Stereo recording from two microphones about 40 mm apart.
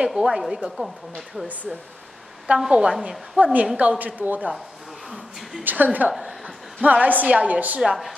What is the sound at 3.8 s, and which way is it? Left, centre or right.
Speech, right.